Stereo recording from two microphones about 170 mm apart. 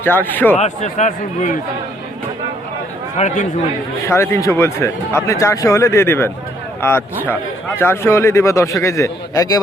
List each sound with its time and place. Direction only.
0.0 s speech: 10° left (ahead or behind)
0.5 s speech: 40° left (ahead or behind)
3.2 s speech: 45° left (ahead or behind)
4.0 s speech: 15° left (ahead or behind)